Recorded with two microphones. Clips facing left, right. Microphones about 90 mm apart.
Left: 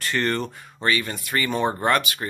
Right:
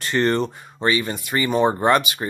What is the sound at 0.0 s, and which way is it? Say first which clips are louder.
Speech: right 5 dB; 20° right (ahead or behind).